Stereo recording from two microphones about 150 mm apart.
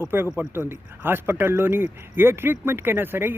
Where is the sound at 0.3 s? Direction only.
15° right (ahead or behind).